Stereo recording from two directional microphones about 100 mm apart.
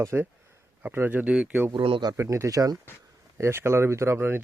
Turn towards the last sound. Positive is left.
turn(degrees=-20)  # may be behind; listen again after turning